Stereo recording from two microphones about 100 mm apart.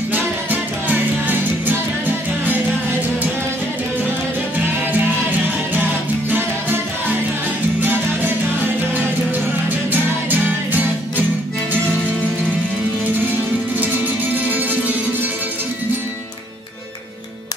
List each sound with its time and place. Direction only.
0.1 s music: 20° right (ahead or behind)
6.3 s music: 20° right (ahead or behind)
9.7 s music: 20° right (ahead or behind)
13.7 s music: 15° right (ahead or behind)